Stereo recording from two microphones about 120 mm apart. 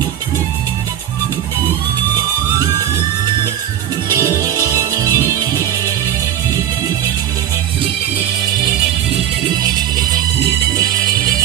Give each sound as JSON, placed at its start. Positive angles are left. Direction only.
{"t": 4.2, "sound": "music", "side_deg": -25}